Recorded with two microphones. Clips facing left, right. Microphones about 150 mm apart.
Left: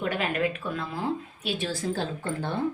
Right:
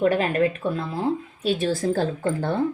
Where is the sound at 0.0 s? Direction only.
35° right (ahead or behind).